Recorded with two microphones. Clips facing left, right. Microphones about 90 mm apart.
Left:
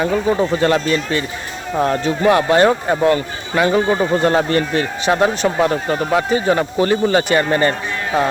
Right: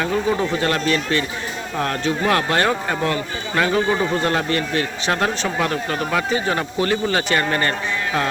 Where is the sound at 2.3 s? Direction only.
20° left (ahead or behind).